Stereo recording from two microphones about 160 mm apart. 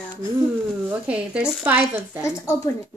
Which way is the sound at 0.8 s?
5° right (ahead or behind).